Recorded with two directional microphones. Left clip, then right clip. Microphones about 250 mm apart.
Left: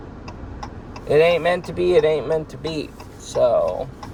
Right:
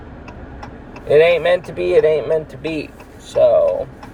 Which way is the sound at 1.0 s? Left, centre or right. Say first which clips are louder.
Right 4 dB; left.